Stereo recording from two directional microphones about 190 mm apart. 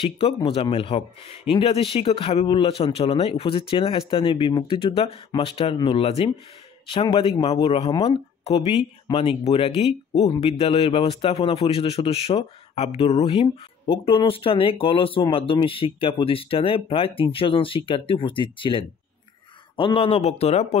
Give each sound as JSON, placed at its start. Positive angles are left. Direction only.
{"t": 0.0, "sound": "a man's voice", "side_deg": 30}